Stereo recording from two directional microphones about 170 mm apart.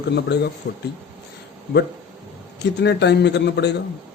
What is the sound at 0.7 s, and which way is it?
Speech, 75° left (ahead or behind).